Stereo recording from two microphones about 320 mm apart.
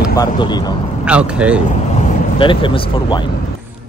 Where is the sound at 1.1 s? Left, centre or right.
Centre.